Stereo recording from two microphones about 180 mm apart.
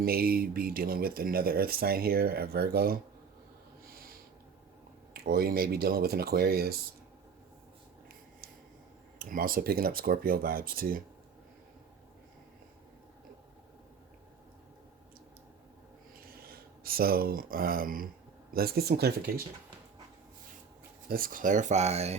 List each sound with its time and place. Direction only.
0.0 s speech: 55° right (ahead or behind)
3.8 s snort: 55° right (ahead or behind)
5.1 s speech: 60° right (ahead or behind)
9.1 s speech: 50° right (ahead or behind)
16.1 s a sound: 55° right (ahead or behind)
18.5 s speech: 60° right (ahead or behind)
21.1 s speech: 50° right (ahead or behind)